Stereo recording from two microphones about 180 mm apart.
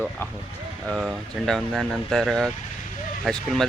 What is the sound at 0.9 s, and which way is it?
Speech, 5° left (ahead or behind).